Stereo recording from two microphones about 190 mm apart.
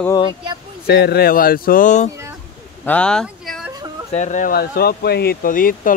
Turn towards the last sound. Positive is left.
turn(degrees=45)  # may be behind; listen again after turning